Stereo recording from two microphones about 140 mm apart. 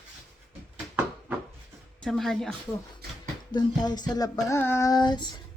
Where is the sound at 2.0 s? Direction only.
5° left (ahead or behind).